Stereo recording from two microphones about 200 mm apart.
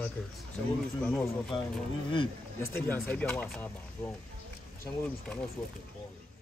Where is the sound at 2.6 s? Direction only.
10° left (ahead or behind).